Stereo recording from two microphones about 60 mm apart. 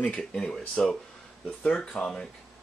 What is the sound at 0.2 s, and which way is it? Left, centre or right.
Speech, centre.